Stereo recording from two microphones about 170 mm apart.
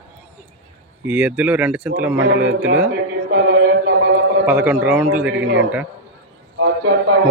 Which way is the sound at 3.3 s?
80° right.